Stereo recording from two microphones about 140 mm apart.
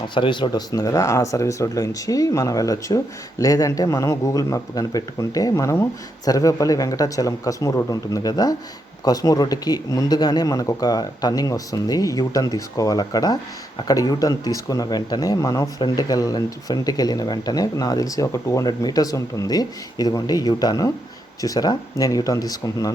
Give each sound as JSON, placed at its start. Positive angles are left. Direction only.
{"t": 0.1, "sound": "speech", "side_deg": 35}